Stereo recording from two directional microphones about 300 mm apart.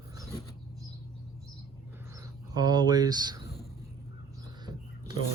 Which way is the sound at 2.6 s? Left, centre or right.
Centre.